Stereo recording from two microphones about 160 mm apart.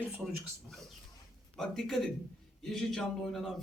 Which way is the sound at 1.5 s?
5° left (ahead or behind).